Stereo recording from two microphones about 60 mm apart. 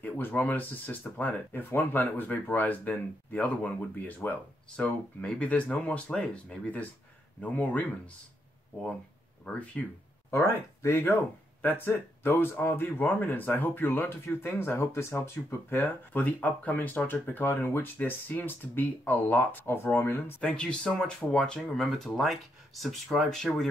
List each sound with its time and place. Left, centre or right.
0.0 s speech: left
9.4 s speech: centre
10.3 s speech: left
15.7 s speech: left
20.4 s speech: centre
21.4 s speech: centre